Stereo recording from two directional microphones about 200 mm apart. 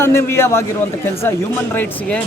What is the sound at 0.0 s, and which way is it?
Speech, 15° left (ahead or behind).